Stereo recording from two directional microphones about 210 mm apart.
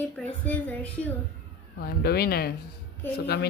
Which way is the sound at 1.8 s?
45° left (ahead or behind).